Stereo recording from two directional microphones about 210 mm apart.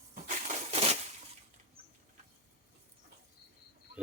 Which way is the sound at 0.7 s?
30° right (ahead or behind).